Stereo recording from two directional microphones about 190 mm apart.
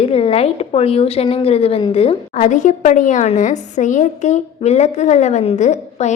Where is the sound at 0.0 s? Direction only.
30° left (ahead or behind).